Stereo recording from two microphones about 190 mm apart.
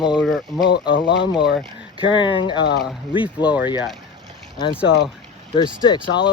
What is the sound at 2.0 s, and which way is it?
Speech, 25° left (ahead or behind).